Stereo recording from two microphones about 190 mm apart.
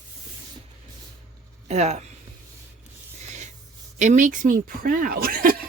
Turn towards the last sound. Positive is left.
turn(degrees=-50)  # may be behind; listen again after turning